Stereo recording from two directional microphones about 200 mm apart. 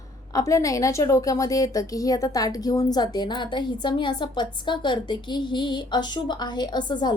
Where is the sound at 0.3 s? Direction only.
15° left (ahead or behind).